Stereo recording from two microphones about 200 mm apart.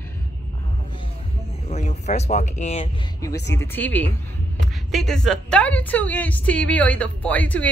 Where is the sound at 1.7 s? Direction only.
35° left (ahead or behind).